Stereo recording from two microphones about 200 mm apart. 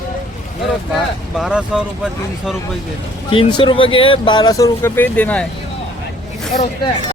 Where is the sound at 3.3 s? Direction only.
25° left (ahead or behind); by 5.4 s 5° left (ahead or behind).